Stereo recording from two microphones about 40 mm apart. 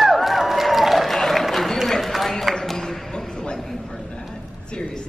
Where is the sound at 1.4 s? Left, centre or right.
Centre.